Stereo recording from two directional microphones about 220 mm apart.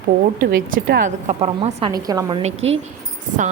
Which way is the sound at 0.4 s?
40° right (ahead or behind).